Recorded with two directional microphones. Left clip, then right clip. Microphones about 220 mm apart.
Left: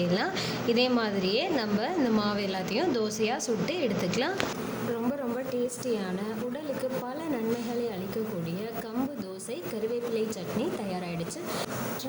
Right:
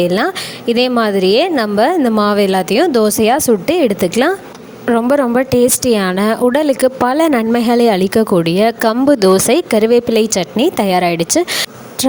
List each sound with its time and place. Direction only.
0.0 s a woman's voice: 50° right (ahead or behind)